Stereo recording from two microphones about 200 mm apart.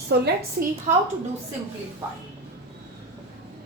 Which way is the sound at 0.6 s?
50° right (ahead or behind).